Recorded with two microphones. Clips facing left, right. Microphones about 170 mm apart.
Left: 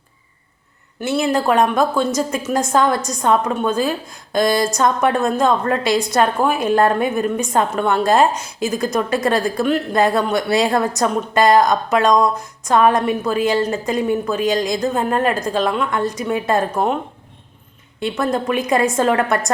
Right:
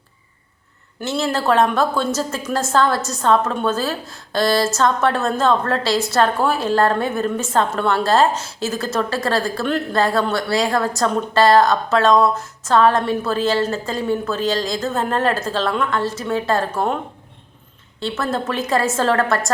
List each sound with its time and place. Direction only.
1.0 s a woman's voice: 15° left (ahead or behind)
18.0 s a woman's voice: 15° left (ahead or behind)